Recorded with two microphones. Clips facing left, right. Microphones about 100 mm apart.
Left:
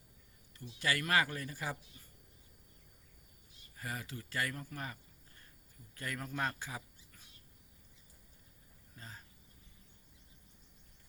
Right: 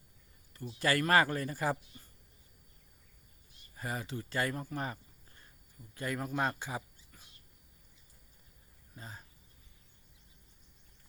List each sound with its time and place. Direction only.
0.5 s speech: 45° right (ahead or behind)
3.8 s speech: 25° right (ahead or behind)
9.0 s a sound: 20° right (ahead or behind)